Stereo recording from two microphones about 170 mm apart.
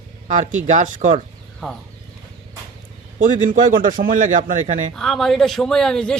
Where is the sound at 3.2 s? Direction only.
55° right (ahead or behind).